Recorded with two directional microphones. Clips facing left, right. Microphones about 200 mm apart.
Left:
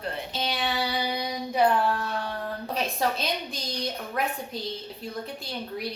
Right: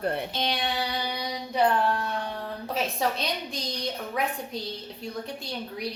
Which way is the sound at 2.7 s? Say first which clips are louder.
Even; centre (ahead or behind).